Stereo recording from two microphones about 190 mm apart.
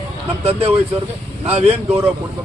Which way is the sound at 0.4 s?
30° right (ahead or behind).